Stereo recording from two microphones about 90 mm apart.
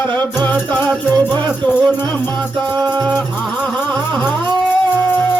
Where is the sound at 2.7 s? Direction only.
50° right (ahead or behind).